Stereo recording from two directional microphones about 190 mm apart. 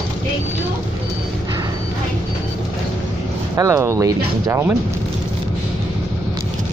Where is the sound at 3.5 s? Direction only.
15° right (ahead or behind).